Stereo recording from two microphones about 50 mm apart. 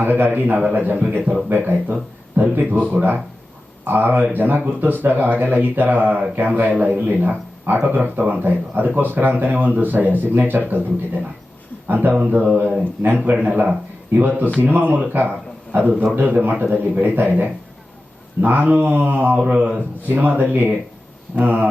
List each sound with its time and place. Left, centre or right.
0.0 s a man's voice: right
13.4 s a man's voice: right
14.1 s speech: right
19.4 s a man's voice: right
20.1 s speech: right